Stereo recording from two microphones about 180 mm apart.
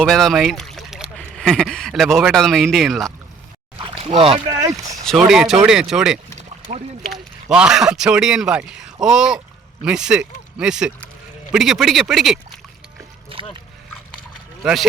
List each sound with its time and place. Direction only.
0.0 s speech: centre (ahead or behind)
3.8 s splash: 30° right (ahead or behind)
4.6 s speech: 20° right (ahead or behind)
5.0 s a man's voice: centre (ahead or behind)
6.3 s a sound: 40° right (ahead or behind)
7.5 s a man's voice: 5° right (ahead or behind)
14.6 s speech: centre (ahead or behind)